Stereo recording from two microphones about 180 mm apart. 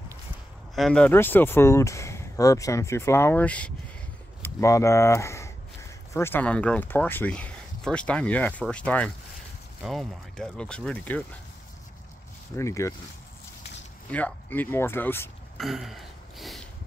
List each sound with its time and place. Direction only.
0.7 s speech: 5° left (ahead or behind)
12.5 s speech: 15° left (ahead or behind)
14.1 s speech: 10° left (ahead or behind)
15.6 s a sound: centre (ahead or behind)